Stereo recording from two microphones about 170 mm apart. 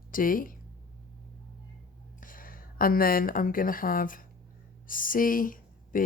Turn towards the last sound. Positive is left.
turn(degrees=55)  # may be behind; listen again after turning